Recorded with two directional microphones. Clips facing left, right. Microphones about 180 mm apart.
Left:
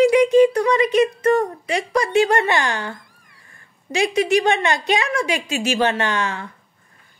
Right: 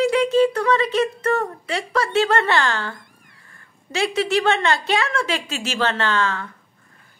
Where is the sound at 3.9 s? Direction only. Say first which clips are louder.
Left 3 dB; 15° left (ahead or behind).